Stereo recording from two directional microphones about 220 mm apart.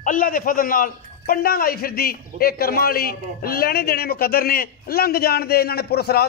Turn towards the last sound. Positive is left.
turn(degrees=45)  # may be behind; listen again after turning